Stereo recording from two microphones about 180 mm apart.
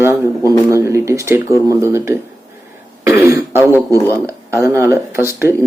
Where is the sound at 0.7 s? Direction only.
15° right (ahead or behind).